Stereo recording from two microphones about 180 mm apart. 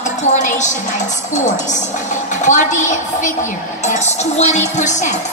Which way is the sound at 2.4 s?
45° left (ahead or behind).